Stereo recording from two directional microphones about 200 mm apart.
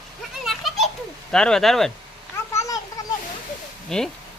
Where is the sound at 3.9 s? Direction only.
Centre (ahead or behind).